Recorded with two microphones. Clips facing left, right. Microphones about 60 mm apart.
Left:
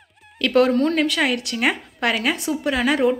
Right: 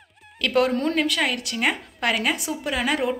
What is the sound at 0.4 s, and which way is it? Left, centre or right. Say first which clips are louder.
A woman's voice: left 4 dB; centre.